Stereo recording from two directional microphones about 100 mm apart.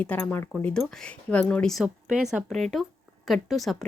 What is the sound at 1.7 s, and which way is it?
A woman's voice, 5° right (ahead or behind).